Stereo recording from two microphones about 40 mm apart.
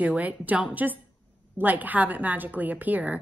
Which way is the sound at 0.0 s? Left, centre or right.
Right.